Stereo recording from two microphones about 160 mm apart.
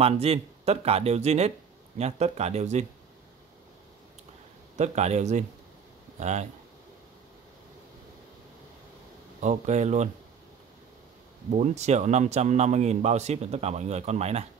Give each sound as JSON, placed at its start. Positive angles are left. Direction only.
{"t": 0.0, "sound": "a man's voice", "side_deg": -40}
{"t": 4.7, "sound": "a man's voice", "side_deg": -45}
{"t": 9.4, "sound": "a man's voice", "side_deg": -45}
{"t": 11.5, "sound": "a man's voice", "side_deg": -45}